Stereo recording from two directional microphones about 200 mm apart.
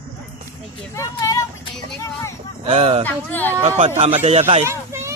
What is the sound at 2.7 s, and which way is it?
Speech, 30° right (ahead or behind).